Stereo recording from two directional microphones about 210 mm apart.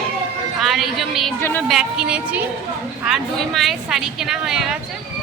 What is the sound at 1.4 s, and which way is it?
Speech, 10° left (ahead or behind).